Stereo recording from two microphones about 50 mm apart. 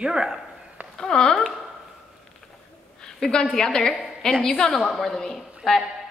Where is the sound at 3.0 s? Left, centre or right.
Centre.